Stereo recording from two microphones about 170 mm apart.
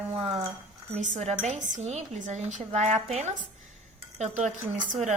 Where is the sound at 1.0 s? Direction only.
45° right (ahead or behind).